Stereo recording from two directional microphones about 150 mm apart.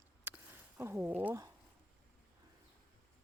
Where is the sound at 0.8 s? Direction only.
15° right (ahead or behind).